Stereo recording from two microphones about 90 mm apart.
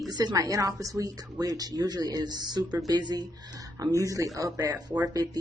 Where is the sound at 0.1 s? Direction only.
50° right (ahead or behind).